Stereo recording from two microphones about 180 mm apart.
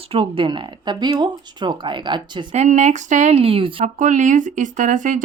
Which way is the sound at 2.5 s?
40° right (ahead or behind).